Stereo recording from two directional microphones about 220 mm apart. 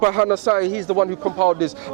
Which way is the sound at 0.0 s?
25° right (ahead or behind).